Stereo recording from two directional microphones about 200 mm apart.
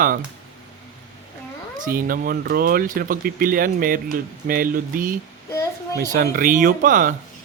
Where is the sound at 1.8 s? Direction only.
45° right (ahead or behind).